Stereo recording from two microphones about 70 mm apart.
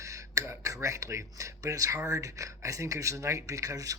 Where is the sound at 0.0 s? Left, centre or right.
Right.